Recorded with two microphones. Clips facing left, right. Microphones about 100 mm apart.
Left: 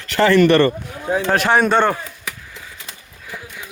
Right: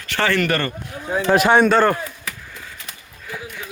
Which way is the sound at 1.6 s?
Centre (ahead or behind).